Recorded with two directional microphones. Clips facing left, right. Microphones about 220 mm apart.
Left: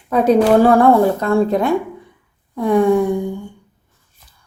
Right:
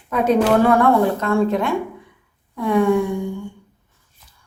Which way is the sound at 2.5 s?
35° left (ahead or behind).